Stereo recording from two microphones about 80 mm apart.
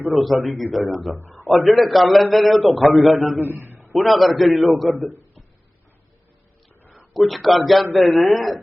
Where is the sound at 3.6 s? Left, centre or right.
Right.